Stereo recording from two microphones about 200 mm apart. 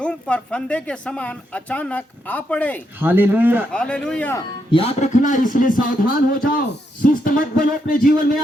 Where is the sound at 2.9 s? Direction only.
10° right (ahead or behind).